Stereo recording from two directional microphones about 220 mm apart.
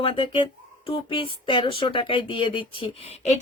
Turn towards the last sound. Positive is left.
turn(degrees=30)  # may be behind; listen again after turning